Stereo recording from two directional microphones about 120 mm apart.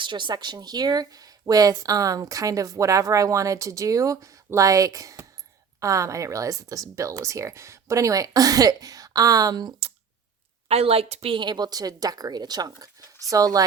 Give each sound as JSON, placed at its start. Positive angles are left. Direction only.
{"t": 0.0, "sound": "speech", "side_deg": -40}
{"t": 10.7, "sound": "a woman's voice", "side_deg": -55}